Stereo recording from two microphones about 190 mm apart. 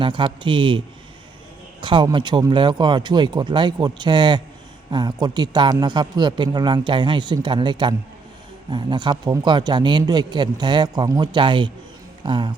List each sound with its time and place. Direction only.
0.0 s a man's voice: 25° right (ahead or behind)
1.8 s a man's voice: 25° right (ahead or behind)